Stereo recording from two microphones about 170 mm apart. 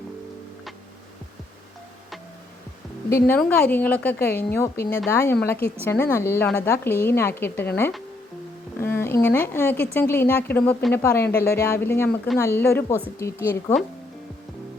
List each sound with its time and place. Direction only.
3.1 s a woman's voice: 15° left (ahead or behind)
8.8 s a woman's voice: 15° left (ahead or behind)